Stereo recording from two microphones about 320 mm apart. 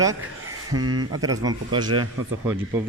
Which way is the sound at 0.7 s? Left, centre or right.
Right.